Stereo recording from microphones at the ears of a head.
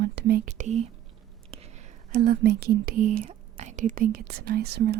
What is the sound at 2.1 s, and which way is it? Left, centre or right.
Speech, right.